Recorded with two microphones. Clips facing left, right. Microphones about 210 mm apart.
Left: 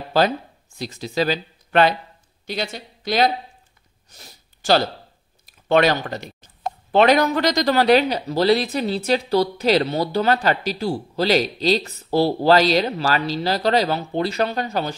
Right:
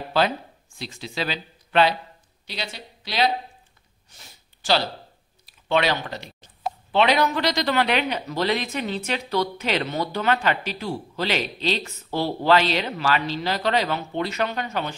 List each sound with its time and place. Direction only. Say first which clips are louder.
0.7 s a man's voice: left 7 dB; 40° left (ahead or behind)
4.1 s a sound: left 4 dB; 40° left (ahead or behind)
5.4 s a man's voice: left 6 dB; 45° left (ahead or behind)